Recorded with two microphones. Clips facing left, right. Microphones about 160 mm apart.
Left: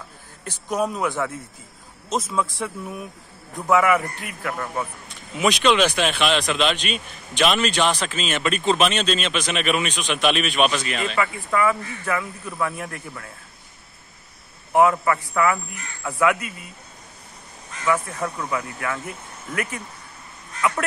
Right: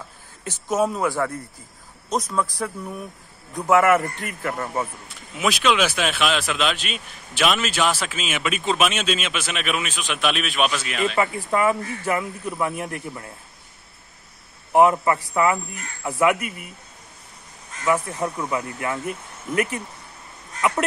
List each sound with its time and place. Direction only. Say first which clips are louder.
0.7 s speech: right 2 dB; 5° right (ahead or behind)
11.1 s speech: left 1 dB; 30° right (ahead or behind)
14.7 s speech: right 1 dB; 25° right (ahead or behind)
17.8 s speech: right 1 dB; 25° right (ahead or behind)